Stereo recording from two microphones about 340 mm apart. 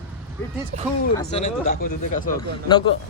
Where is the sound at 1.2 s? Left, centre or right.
Centre.